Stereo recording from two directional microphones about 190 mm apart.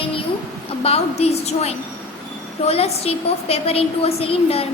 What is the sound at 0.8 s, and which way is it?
A woman's voice, 30° left (ahead or behind).